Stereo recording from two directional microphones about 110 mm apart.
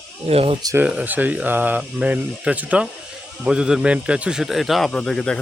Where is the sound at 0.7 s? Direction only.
15° right (ahead or behind).